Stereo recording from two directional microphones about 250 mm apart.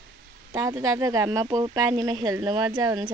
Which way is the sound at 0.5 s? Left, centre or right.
Centre.